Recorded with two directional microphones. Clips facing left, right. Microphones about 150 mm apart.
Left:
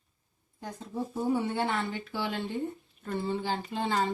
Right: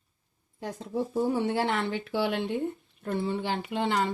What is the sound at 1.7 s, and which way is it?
Speech, 75° right (ahead or behind).